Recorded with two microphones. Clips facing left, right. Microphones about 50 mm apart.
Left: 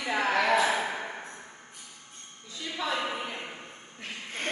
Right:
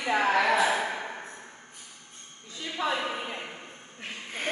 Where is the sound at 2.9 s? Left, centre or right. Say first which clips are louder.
Right 1 dB; centre.